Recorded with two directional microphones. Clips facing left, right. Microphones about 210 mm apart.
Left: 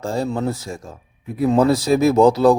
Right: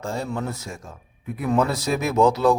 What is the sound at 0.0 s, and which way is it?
A man's voice, 35° left (ahead or behind).